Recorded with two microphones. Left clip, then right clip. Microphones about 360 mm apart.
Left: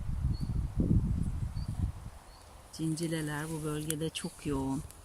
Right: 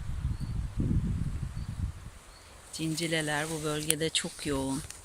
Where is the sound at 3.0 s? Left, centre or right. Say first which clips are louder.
Right 8 dB; right.